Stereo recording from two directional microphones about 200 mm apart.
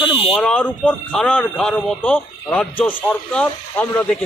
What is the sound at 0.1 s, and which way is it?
Buzzer, 25° left (ahead or behind).